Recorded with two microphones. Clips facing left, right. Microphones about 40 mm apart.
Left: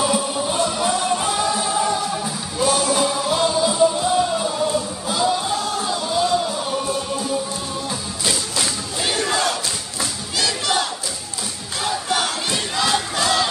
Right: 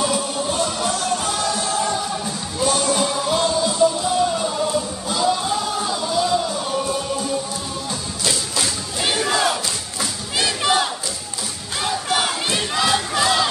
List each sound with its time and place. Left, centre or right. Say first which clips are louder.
0.0 s music: left 1 dB; centre
9.0 s battle cry: right 1 dB; centre
10.3 s crowd: right 2 dB; right
11.8 s battle cry: right 1 dB; centre